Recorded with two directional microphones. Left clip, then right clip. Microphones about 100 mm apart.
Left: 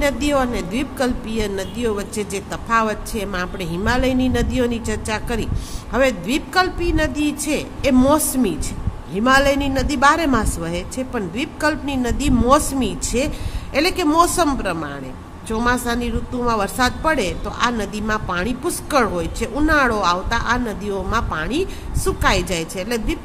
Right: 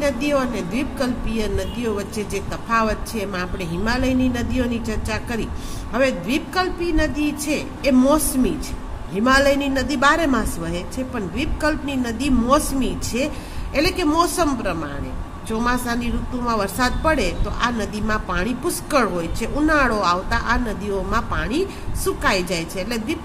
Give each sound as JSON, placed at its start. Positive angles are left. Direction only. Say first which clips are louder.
{"t": 0.0, "sound": "a woman's voice", "louder": "left 2 dB", "side_deg": 35}
{"t": 9.1, "sound": "a woman's voice", "louder": "left 1 dB", "side_deg": 30}